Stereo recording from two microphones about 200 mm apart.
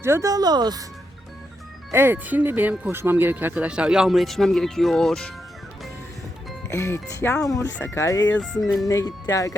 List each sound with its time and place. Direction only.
0.0 s speech: 15° right (ahead or behind)
1.9 s speech: 10° right (ahead or behind)
6.7 s speech: 15° left (ahead or behind)
8.4 s music: centre (ahead or behind)
8.9 s speech: 15° left (ahead or behind)